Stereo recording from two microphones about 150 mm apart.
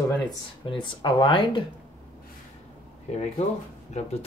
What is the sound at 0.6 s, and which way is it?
Speech, 35° left (ahead or behind).